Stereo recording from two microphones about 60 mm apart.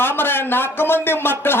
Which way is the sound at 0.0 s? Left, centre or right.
Left.